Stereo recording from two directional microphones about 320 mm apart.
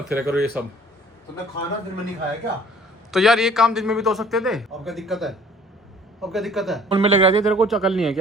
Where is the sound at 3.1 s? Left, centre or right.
Centre.